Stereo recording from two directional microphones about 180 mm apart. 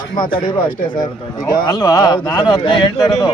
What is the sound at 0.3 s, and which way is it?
Speech, 25° left (ahead or behind).